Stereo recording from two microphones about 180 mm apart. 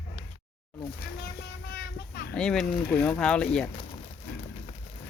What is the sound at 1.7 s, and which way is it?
Child singing, 60° left (ahead or behind).